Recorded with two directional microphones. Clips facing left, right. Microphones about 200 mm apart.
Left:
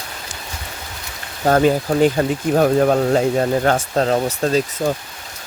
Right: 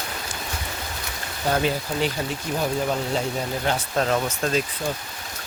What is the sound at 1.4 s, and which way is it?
Speech, 45° left (ahead or behind).